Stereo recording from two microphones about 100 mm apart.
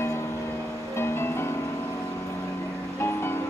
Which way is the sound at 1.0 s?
25° left (ahead or behind).